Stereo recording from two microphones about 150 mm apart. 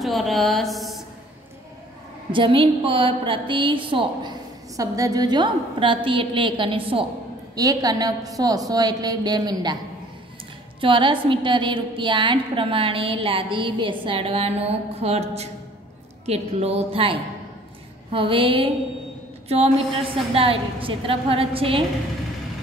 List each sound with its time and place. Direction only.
0.0 s speech: centre (ahead or behind)
2.3 s a woman's voice: 35° right (ahead or behind)
7.5 s a woman's voice: 25° right (ahead or behind)
10.8 s a woman's voice: 35° right (ahead or behind)